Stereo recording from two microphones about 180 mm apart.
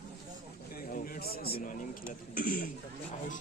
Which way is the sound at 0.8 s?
50° left (ahead or behind).